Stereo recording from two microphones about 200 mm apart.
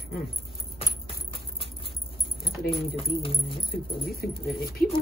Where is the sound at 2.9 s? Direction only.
25° left (ahead or behind).